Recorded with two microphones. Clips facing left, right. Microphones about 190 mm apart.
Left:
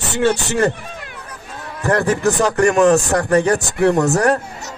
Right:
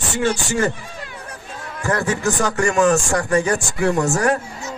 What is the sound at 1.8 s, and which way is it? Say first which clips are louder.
Speech: left 4 dB; 60° left (ahead or behind).